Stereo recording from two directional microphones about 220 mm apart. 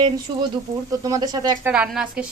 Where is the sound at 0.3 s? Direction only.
20° right (ahead or behind).